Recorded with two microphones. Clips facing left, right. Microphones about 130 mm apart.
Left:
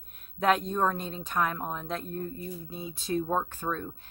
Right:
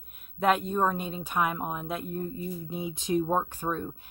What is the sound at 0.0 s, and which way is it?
Speech, 5° right (ahead or behind).